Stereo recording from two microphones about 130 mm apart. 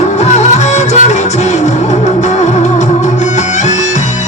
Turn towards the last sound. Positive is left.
turn(degrees=65)  # may be behind; listen again after turning